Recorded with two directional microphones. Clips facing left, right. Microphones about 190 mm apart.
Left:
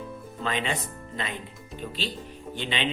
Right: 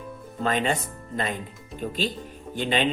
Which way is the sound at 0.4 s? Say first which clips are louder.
Right 5 dB; 45° right (ahead or behind).